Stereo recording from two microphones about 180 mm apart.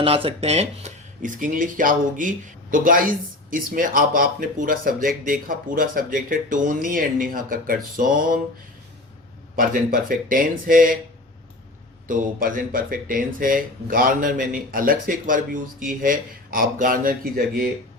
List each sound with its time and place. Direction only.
0.0 s speech: 30° right (ahead or behind); by 8.4 s 50° right (ahead or behind)
9.6 s speech: 50° right (ahead or behind)
12.0 s speech: 50° right (ahead or behind)